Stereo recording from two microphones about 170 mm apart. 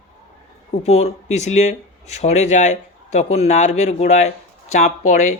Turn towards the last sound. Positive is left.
turn(degrees=45)  # may be behind; listen again after turning